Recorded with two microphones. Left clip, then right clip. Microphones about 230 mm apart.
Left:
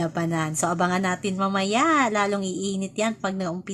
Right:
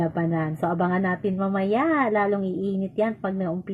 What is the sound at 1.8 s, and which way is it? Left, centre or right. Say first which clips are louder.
Speech: left 2 dB; left.